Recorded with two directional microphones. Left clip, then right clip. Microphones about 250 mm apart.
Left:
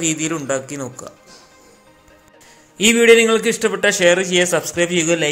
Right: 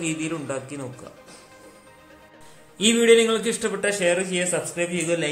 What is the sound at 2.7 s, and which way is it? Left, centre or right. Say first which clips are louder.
A man's voice: left 6 dB; left.